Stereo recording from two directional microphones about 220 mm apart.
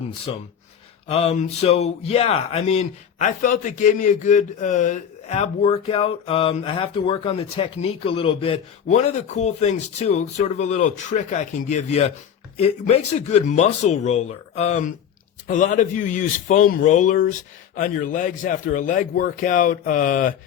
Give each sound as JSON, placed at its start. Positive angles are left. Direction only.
{"t": 0.3, "sound": "speech", "side_deg": 25}